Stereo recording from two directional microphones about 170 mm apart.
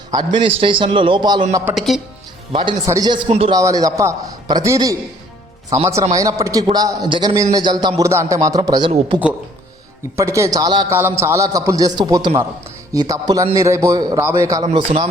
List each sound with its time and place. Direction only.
0.1 s a man's voice: 25° right (ahead or behind)
1.7 s speech: centre (ahead or behind)
2.5 s a man's voice: 25° right (ahead or behind)
3.2 s speech: 35° right (ahead or behind)
3.5 s a man's voice: 20° right (ahead or behind)
8.9 s speech: 35° right (ahead or behind)
10.2 s a man's voice: 15° right (ahead or behind)
14.6 s speech: 40° right (ahead or behind)